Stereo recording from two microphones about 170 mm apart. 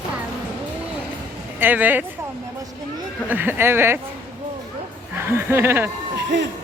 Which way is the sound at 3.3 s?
10° right (ahead or behind).